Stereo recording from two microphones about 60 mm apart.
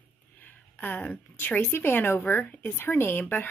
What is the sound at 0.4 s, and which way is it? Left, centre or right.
A woman's voice, left.